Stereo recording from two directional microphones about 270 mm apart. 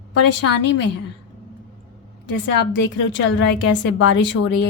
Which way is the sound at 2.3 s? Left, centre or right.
Left.